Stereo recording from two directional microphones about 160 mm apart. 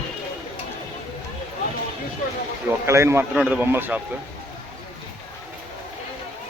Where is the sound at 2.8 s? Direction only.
15° right (ahead or behind).